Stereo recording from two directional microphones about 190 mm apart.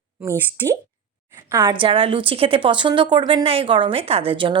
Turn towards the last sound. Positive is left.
turn(degrees=-25)  # may be behind; listen again after turning